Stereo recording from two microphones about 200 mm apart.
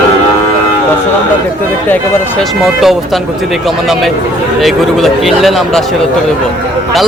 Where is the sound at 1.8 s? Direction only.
10° left (ahead or behind).